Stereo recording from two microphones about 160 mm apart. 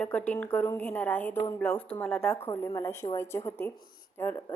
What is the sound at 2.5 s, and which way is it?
A woman's voice, 20° left (ahead or behind).